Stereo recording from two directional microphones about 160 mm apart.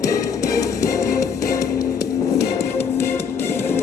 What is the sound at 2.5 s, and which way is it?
Music, 45° left (ahead or behind).